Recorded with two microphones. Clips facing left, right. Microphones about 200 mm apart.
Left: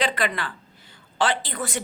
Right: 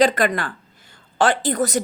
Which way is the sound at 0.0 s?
45° right (ahead or behind).